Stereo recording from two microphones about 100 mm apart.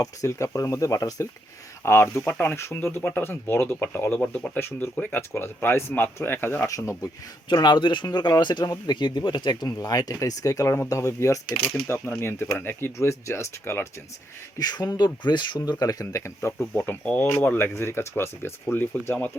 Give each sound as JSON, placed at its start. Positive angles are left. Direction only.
{"t": 0.0, "sound": "speech", "side_deg": 30}
{"t": 6.7, "sound": "speech", "side_deg": 35}
{"t": 7.5, "sound": "speech", "side_deg": 45}
{"t": 14.6, "sound": "speech", "side_deg": 40}